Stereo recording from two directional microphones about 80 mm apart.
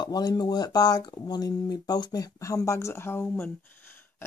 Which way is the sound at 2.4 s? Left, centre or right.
Left.